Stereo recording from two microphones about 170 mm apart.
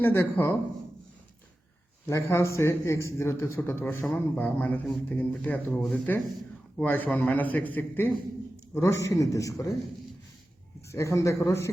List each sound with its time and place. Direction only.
0.0 s speech: 10° left (ahead or behind)
2.0 s a man's voice: 15° left (ahead or behind)
10.8 s speech: 15° left (ahead or behind)